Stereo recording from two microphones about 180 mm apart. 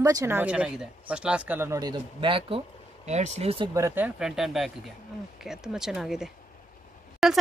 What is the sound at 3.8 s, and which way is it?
Speech, 15° right (ahead or behind).